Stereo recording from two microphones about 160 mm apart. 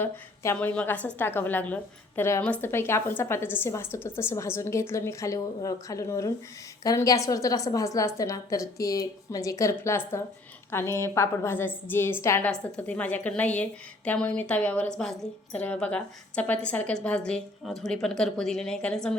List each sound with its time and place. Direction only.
0.0 s a woman's voice: 10° left (ahead or behind)